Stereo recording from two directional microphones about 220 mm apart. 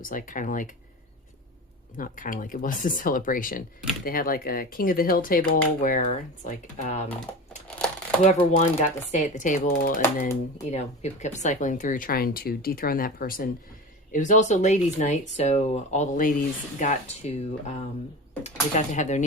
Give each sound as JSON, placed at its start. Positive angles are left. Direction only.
{"t": 0.0, "sound": "speech", "side_deg": 40}
{"t": 2.0, "sound": "speech", "side_deg": 40}
{"t": 8.2, "sound": "speech", "side_deg": 35}
{"t": 18.4, "sound": "speech", "side_deg": 35}